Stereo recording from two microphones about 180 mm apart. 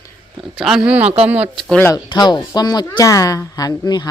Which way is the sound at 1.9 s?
25° left (ahead or behind).